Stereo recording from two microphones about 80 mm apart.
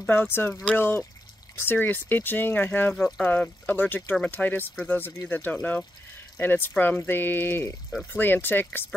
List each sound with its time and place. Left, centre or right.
0.0 s speech: left